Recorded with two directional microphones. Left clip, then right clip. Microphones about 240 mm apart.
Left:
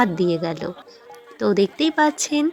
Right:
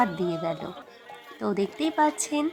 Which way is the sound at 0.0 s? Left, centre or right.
Centre.